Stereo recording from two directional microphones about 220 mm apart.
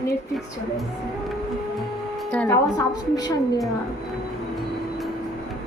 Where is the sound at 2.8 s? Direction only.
15° left (ahead or behind).